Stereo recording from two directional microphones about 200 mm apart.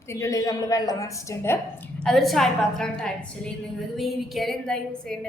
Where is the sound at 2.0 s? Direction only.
Centre (ahead or behind).